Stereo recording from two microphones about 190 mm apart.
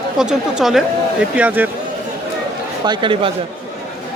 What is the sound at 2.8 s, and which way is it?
Speech, 25° right (ahead or behind).